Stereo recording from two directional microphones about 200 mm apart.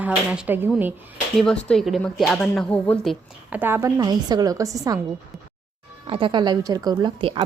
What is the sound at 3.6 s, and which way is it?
A woman's voice, 10° right (ahead or behind).